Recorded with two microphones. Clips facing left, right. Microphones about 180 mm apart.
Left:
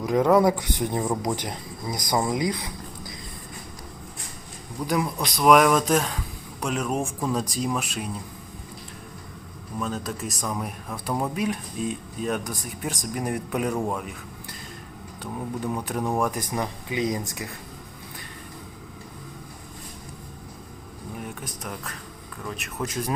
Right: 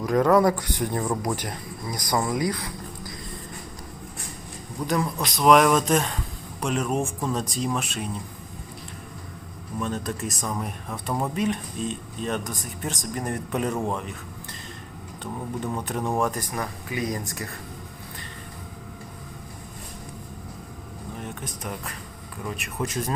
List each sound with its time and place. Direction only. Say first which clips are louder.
0.0 s speech: even; 15° left (ahead or behind)
4.8 s speech: even; 10° left (ahead or behind)
9.8 s speech: right 1 dB; 5° left (ahead or behind)
15.2 s speech: left 1 dB; 5° left (ahead or behind)
16.3 s speech: left 2 dB; 20° left (ahead or behind)